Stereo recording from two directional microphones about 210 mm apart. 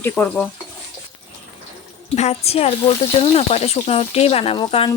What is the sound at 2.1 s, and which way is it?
Speech, 30° left (ahead or behind).